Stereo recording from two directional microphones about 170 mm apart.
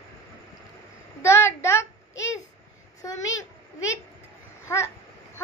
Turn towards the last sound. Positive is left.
turn(degrees=15)  # may be behind; listen again after turning